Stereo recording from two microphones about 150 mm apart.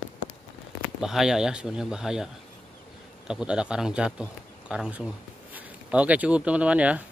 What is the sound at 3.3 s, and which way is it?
A man's voice, 5° right (ahead or behind).